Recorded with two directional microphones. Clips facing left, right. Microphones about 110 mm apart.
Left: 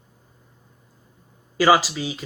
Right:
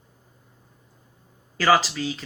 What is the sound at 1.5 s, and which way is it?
Speech, 15° left (ahead or behind).